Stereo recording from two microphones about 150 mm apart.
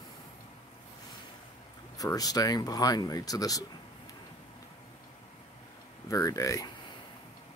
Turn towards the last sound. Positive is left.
turn(degrees=20)  # may be behind; listen again after turning